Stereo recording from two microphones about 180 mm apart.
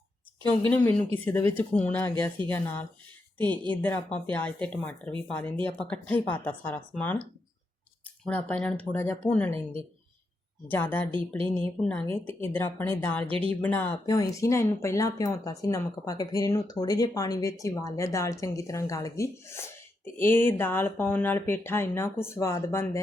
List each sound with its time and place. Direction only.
0.7 s speech: 10° left (ahead or behind)
10.7 s speech: 10° left (ahead or behind)
13.2 s speech: 30° right (ahead or behind)
13.5 s speech: 10° left (ahead or behind)